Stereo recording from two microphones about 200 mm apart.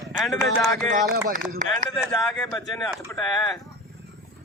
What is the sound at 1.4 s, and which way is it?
Speech, centre (ahead or behind).